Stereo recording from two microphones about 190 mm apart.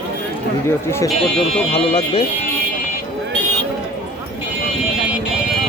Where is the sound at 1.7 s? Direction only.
30° left (ahead or behind).